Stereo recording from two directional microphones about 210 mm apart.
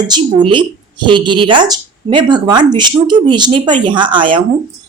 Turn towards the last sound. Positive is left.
turn(degrees=-25)  # may be behind; listen again after turning